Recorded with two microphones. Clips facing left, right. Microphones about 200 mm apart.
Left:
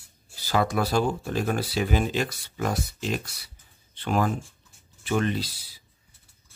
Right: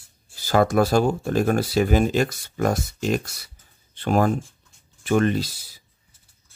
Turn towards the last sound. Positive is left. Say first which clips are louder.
# right 5 dB
turn(degrees=-45)  # may be behind; listen again after turning